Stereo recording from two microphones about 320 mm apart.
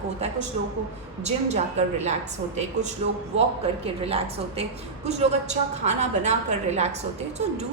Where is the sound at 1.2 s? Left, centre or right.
Right.